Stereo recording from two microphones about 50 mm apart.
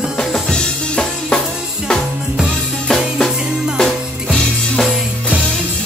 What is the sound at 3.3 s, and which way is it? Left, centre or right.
Music, centre.